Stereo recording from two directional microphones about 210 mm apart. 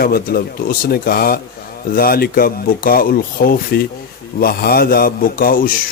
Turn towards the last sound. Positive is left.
turn(degrees=45)  # may be behind; listen again after turning